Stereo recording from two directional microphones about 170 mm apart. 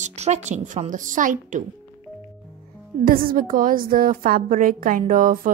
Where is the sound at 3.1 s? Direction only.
55° right (ahead or behind).